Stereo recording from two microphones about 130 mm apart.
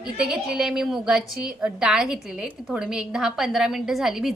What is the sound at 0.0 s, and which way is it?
A woman's voice, 5° right (ahead or behind).